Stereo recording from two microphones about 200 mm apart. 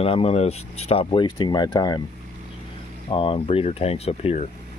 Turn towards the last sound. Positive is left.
turn(degrees=30)  # may be behind; listen again after turning